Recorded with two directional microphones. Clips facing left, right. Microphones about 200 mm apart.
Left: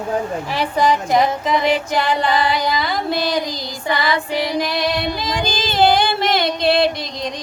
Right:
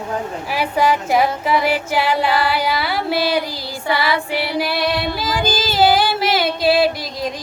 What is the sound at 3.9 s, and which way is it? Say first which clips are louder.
Child singing: even; 10° right (ahead or behind).